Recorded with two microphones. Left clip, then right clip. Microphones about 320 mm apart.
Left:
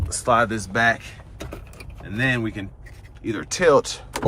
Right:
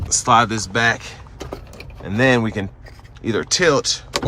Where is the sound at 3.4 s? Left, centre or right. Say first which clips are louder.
Even; centre.